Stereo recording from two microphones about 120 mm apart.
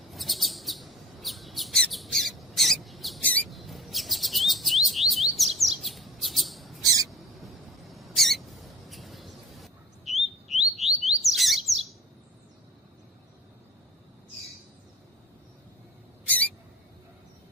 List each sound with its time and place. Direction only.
0.1 s chirp: centre (ahead or behind)
3.2 s rodents: 10° left (ahead or behind)
3.5 s chirp: centre (ahead or behind)
6.8 s bird: 30° right (ahead or behind)
7.4 s mouse: centre (ahead or behind)
8.9 s a sound: centre (ahead or behind)
10.1 s bird: centre (ahead or behind)
10.8 s chirp: centre (ahead or behind)